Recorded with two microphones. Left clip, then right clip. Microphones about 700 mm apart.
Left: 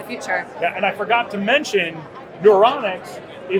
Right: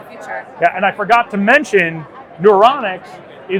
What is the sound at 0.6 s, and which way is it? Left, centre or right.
Speech, right.